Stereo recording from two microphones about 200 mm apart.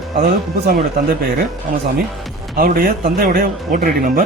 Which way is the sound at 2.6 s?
45° right (ahead or behind).